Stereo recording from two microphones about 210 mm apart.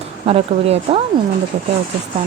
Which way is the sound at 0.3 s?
30° right (ahead or behind).